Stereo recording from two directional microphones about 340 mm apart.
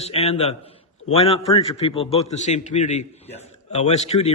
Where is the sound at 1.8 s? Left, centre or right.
Centre.